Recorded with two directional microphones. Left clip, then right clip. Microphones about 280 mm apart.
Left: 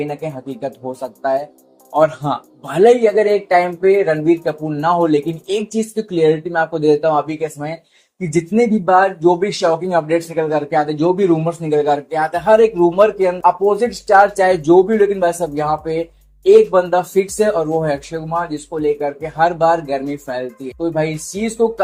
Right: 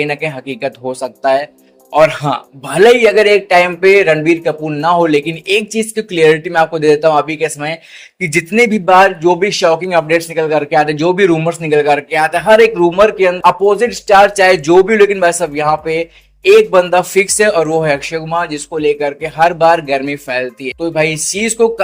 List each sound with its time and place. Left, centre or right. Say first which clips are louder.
0.0 s a man's voice: right 7 dB; right